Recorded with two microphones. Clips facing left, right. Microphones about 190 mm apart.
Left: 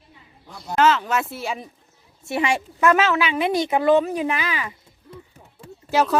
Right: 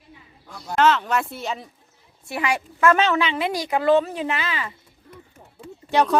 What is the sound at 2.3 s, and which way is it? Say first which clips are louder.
Speech: left 3 dB; 25° left (ahead or behind).